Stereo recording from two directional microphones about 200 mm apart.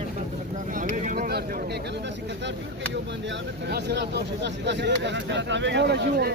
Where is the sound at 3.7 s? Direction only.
55° right (ahead or behind).